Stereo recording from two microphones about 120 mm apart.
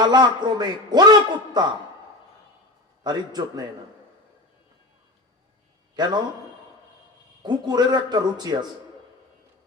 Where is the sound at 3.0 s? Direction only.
35° right (ahead or behind).